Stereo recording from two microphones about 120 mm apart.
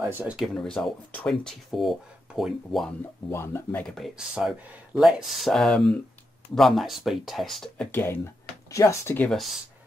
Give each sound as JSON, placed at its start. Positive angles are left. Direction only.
{"t": 0.1, "sound": "speech", "side_deg": -15}
{"t": 0.4, "sound": "speech", "side_deg": 5}
{"t": 3.3, "sound": "speech", "side_deg": 20}
{"t": 3.9, "sound": "speech", "side_deg": 0}